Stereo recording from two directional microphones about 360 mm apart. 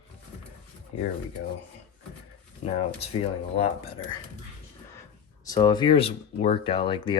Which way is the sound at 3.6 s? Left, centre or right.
Centre.